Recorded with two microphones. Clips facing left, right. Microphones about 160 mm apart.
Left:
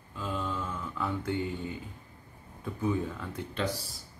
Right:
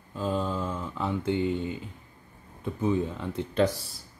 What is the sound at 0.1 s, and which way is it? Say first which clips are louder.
Mantra: right 6 dB; 35° right (ahead or behind).